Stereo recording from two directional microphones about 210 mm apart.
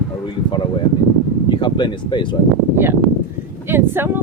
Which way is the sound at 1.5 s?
20° left (ahead or behind).